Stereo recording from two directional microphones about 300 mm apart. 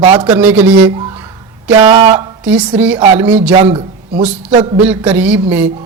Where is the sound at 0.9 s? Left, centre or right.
Centre.